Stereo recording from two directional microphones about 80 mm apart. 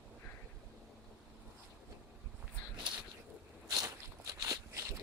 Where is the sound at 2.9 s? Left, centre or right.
Right.